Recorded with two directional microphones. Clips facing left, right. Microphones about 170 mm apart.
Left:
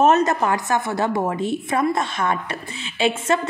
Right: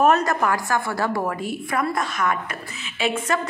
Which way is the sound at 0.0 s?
25° left (ahead or behind).